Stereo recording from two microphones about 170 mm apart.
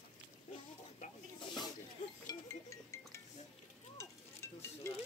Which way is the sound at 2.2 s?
15° left (ahead or behind).